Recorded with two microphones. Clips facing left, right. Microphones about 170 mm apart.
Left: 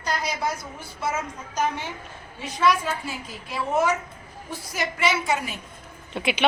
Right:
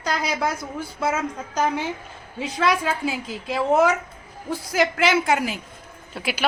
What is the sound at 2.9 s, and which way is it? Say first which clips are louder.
A woman's voice: right 5 dB; 90° right.